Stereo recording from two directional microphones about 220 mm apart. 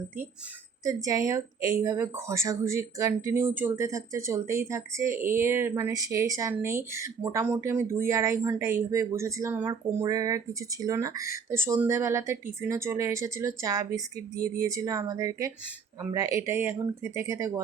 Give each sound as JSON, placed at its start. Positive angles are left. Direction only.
{"t": 0.9, "sound": "speech", "side_deg": -15}
{"t": 14.3, "sound": "speech", "side_deg": -40}
{"t": 14.6, "sound": "speech", "side_deg": -15}